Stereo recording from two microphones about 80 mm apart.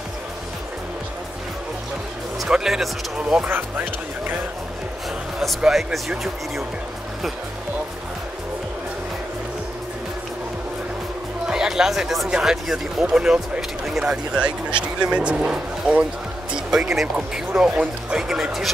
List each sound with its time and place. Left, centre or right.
2.4 s speech: centre
3.4 s speech: right
5.6 s speech: centre
11.4 s speech: centre